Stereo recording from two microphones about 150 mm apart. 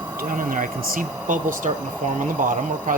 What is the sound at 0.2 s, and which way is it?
Speech, 65° right (ahead or behind).